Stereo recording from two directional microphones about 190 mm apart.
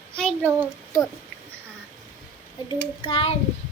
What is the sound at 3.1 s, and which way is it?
Speech, 30° left (ahead or behind).